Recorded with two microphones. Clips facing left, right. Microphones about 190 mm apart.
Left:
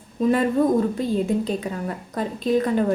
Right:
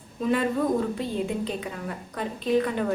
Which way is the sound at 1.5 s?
40° left (ahead or behind).